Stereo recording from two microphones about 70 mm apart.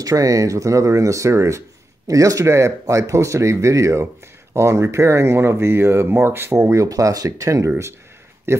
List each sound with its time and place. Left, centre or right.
0.0 s speech: right
8.5 s speech: right